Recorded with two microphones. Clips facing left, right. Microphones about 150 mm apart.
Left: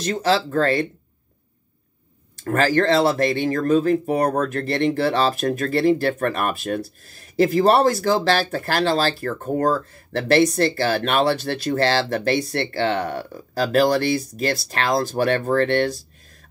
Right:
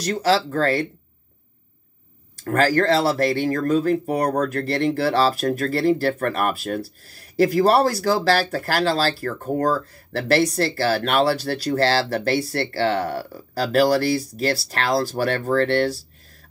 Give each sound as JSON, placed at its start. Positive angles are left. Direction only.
{"t": 0.0, "sound": "speech", "side_deg": 20}
{"t": 2.3, "sound": "speech", "side_deg": 20}